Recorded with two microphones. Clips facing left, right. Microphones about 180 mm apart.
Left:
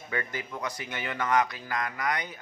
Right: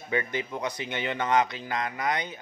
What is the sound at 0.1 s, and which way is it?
A man's voice, 20° right (ahead or behind).